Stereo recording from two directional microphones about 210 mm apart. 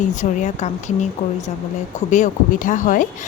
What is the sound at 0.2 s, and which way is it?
Speech, 35° left (ahead or behind).